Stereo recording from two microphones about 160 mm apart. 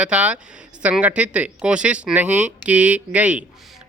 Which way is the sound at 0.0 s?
5° right (ahead or behind).